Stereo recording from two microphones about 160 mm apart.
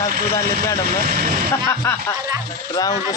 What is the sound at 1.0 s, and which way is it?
Speech, 55° right (ahead or behind).